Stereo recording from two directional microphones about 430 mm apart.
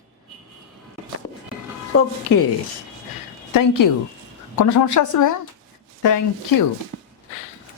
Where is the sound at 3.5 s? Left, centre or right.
Left.